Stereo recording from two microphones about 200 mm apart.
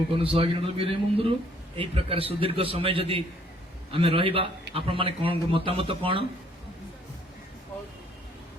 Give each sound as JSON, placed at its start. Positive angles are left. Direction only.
{"t": 0.1, "sound": "a man's voice", "side_deg": -25}